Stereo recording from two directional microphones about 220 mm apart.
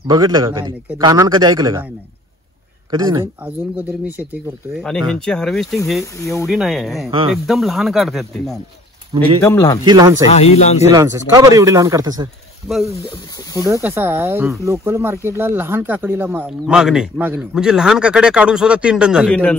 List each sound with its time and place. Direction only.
0.1 s a man's voice: 20° right (ahead or behind)
2.9 s speech: 20° right (ahead or behind)
3.4 s a man's voice: 5° right (ahead or behind)
4.8 s speech: 5° left (ahead or behind)
9.4 s a man's voice: 15° left (ahead or behind)
9.8 s a man's voice: 15° right (ahead or behind)
10.2 s speech: 30° left (ahead or behind)
10.9 s a man's voice: 15° right (ahead or behind)
12.6 s speech: centre (ahead or behind)